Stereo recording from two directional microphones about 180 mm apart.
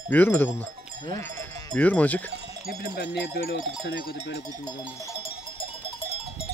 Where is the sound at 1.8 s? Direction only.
10° left (ahead or behind).